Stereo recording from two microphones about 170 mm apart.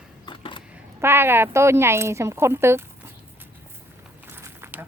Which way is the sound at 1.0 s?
15° right (ahead or behind).